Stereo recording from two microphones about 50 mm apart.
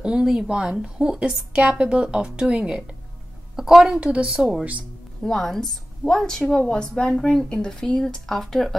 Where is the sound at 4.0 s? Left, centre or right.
Centre.